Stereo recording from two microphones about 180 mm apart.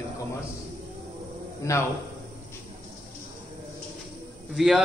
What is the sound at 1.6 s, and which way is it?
Speech, 15° left (ahead or behind).